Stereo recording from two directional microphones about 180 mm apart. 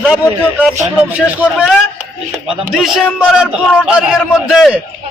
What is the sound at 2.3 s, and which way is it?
A man's voice, centre (ahead or behind).